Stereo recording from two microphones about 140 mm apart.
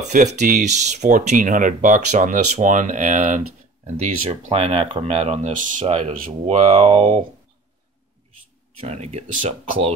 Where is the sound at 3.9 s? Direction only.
50° right (ahead or behind).